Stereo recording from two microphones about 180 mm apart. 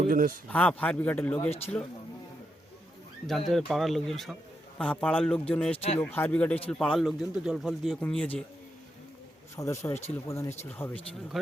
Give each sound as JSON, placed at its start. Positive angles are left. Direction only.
{"t": 0.1, "sound": "speech", "side_deg": -50}
{"t": 0.4, "sound": "speech", "side_deg": 5}
{"t": 1.4, "sound": "speech", "side_deg": 35}
{"t": 3.2, "sound": "speech", "side_deg": 0}
{"t": 5.7, "sound": "speech", "side_deg": 35}
{"t": 6.0, "sound": "speech", "side_deg": 10}
{"t": 9.6, "sound": "speech", "side_deg": 15}